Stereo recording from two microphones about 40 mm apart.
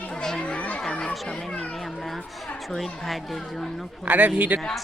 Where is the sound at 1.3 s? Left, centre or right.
Centre.